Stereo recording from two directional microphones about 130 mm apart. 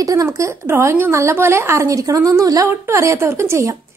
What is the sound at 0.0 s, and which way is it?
A woman's voice, 25° right (ahead or behind).